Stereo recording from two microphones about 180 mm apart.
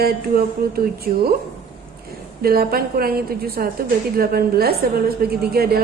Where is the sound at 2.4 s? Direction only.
55° right (ahead or behind).